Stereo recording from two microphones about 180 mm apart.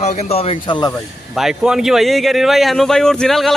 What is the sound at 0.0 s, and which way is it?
Speech, 35° left (ahead or behind).